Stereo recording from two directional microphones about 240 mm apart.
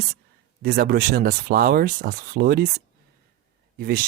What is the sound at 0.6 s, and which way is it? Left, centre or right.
Speech, right.